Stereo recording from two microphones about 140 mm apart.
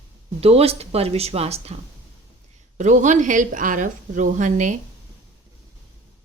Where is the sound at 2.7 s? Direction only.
60° right (ahead or behind).